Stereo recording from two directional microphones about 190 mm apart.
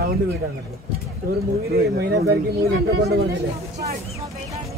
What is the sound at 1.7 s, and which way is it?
Speech, 55° right (ahead or behind).